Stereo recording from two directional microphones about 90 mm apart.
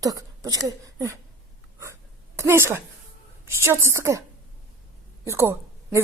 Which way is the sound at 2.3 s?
30° right (ahead or behind).